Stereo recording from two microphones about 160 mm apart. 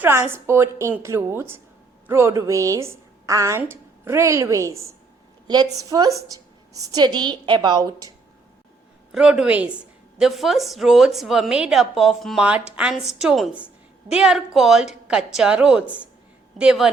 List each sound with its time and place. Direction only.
0.0 s a woman's voice: 15° right (ahead or behind)
9.1 s a woman's voice: 5° right (ahead or behind)